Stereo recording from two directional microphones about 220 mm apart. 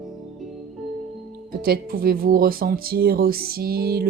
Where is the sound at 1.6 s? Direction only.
45° right (ahead or behind).